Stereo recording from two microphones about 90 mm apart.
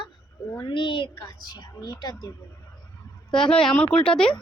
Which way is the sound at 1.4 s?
50° left (ahead or behind).